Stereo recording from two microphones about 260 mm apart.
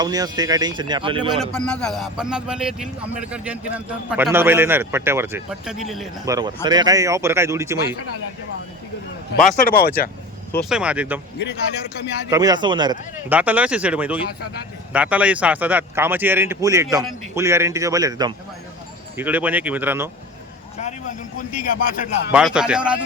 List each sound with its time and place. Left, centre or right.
0.0 s speech: centre
1.5 s a man's voice: centre
6.2 s speech: centre
9.5 s a man's voice: left
10.6 s a man's voice: centre
12.3 s speech: centre
21.3 s a man's voice: left
22.3 s a man's voice: centre